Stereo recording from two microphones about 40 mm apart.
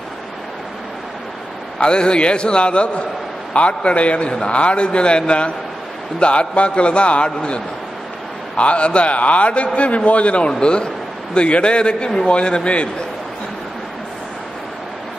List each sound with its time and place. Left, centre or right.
1.8 s a man's voice: left
8.5 s a man's voice: left